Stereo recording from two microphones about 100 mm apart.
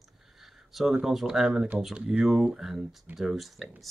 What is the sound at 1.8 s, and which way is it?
Speech, 5° right (ahead or behind).